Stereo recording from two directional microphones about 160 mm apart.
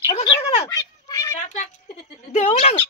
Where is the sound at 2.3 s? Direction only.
45° left (ahead or behind).